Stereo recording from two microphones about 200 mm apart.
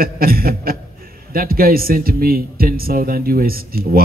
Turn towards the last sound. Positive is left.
turn(degrees=-45)  # may be behind; listen again after turning